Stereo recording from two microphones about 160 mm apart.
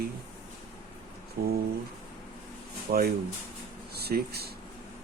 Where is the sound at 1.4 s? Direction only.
70° right (ahead or behind).